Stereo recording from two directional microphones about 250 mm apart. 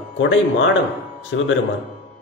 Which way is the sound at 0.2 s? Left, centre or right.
Left.